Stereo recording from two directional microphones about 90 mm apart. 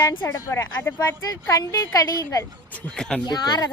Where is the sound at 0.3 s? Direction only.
35° left (ahead or behind).